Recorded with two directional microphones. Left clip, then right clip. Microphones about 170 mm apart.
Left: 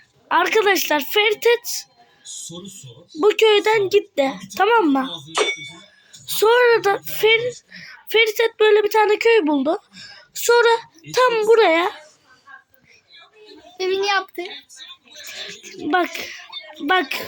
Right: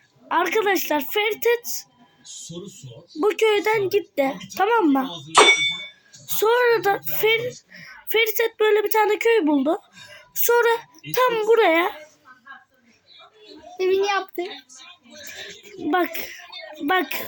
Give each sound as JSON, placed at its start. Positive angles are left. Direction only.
{"t": 0.3, "sound": "speech", "side_deg": 5}
{"t": 3.2, "sound": "speech", "side_deg": 5}
{"t": 13.7, "sound": "a child's voice", "side_deg": -20}
{"t": 15.3, "sound": "a sound", "side_deg": 5}
{"t": 15.9, "sound": "speech", "side_deg": 5}